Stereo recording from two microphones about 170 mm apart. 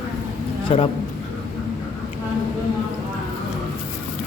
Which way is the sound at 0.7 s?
35° left (ahead or behind).